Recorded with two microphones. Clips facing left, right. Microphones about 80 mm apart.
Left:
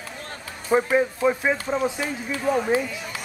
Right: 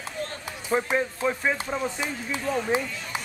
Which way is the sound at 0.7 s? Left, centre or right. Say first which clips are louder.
Left 5 dB; centre.